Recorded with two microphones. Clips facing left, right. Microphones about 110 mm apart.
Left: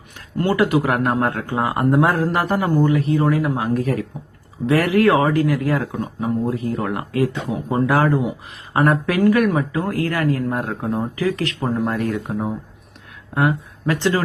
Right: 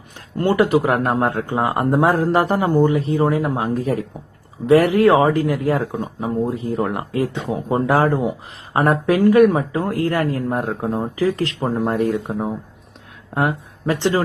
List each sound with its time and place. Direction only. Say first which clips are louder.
0.5 s speech: right 2 dB; 30° right (ahead or behind)